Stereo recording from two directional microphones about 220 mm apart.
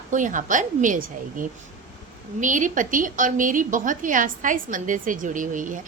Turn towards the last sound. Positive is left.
turn(degrees=-35)  # may be behind; listen again after turning